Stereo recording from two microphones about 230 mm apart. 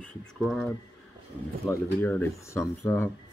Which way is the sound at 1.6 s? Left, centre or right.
Centre.